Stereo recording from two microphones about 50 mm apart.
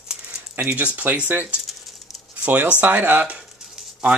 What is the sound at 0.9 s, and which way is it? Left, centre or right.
Speech, right.